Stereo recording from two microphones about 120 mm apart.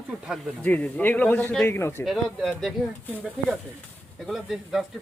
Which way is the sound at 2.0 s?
Centre (ahead or behind).